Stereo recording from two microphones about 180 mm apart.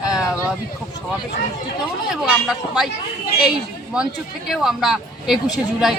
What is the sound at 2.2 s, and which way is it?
Speech, centre (ahead or behind).